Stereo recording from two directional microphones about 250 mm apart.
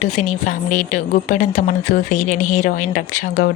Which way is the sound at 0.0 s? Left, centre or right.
Left.